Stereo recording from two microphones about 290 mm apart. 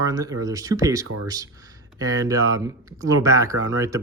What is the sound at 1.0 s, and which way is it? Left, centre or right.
Speech, right.